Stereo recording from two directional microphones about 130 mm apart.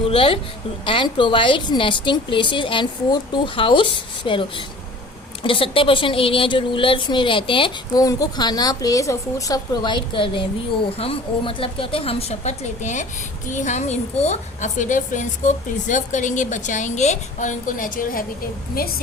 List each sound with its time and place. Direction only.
0.0 s a woman's voice: 45° left (ahead or behind)
7.9 s a woman's voice: 30° left (ahead or behind); by 18.3 s 90° left